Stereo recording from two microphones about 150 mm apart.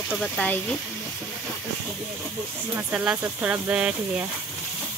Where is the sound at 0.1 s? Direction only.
5° left (ahead or behind).